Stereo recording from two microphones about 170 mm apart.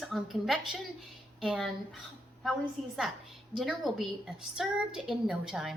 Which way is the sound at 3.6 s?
Centre (ahead or behind).